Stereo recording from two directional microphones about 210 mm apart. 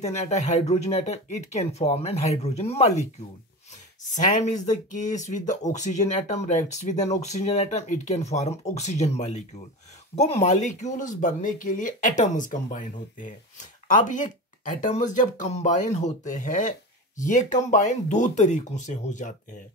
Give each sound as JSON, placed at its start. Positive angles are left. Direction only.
{"t": 0.0, "sound": "speech", "side_deg": 30}
{"t": 4.1, "sound": "speech", "side_deg": 35}